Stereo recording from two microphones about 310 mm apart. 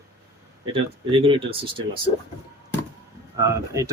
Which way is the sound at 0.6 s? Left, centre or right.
Centre.